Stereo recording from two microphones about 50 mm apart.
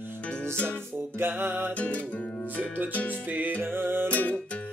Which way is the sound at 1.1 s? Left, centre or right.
Right.